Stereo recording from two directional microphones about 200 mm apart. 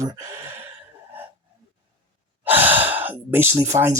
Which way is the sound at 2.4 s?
10° right (ahead or behind).